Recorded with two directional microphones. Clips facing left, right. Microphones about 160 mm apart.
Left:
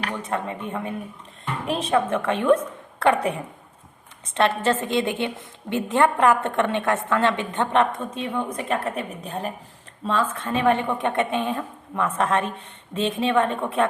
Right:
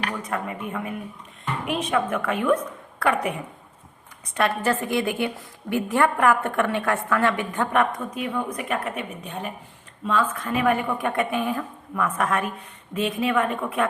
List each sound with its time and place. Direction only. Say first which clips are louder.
0.1 s a woman's voice: left 1 dB; 25° left (ahead or behind)
4.4 s a woman's voice: left 2 dB; 25° left (ahead or behind)